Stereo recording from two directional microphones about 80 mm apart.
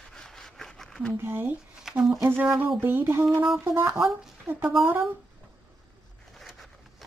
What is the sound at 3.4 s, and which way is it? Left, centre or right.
Speech, centre.